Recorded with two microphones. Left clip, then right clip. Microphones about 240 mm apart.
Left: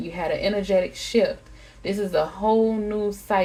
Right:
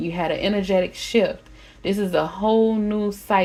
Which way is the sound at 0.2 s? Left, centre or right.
Right.